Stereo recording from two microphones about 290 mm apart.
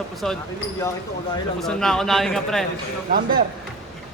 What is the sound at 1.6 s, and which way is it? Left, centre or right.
Speech, centre.